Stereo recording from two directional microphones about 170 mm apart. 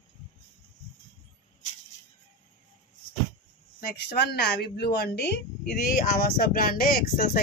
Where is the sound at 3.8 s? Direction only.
70° left (ahead or behind).